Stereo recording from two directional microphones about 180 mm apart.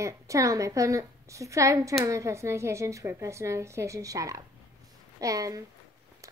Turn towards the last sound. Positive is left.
turn(degrees=-20)  # may be behind; listen again after turning